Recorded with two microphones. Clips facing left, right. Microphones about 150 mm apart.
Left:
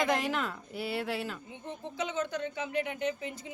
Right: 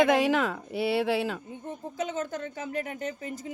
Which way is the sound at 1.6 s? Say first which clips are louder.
Right 3 dB; 45° right (ahead or behind).